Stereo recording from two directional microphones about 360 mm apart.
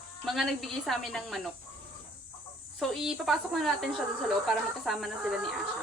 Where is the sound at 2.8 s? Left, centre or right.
Centre.